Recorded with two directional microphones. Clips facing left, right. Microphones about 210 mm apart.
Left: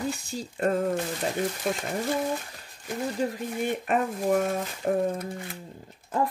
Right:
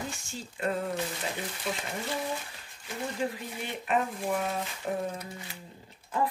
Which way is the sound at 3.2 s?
50° left (ahead or behind).